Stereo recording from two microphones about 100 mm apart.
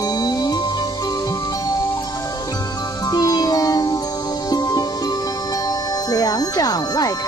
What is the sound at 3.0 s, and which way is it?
Music, 40° left (ahead or behind).